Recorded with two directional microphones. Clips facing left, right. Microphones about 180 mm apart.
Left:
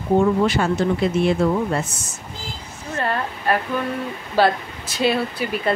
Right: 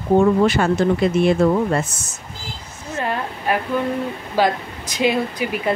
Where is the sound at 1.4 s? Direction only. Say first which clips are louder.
Right 4 dB; 50° right (ahead or behind).